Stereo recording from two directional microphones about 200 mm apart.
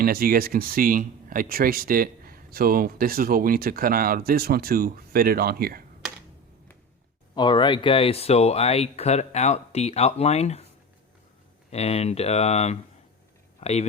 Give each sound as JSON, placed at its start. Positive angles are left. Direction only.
{"t": 0.0, "sound": "speech", "side_deg": -50}
{"t": 7.3, "sound": "speech", "side_deg": 25}
{"t": 11.7, "sound": "speech", "side_deg": 30}